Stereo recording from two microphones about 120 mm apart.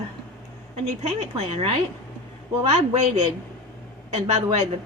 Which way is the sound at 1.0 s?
60° right (ahead or behind).